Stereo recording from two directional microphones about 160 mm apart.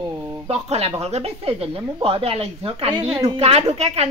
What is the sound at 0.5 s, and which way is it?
Speech, 40° right (ahead or behind).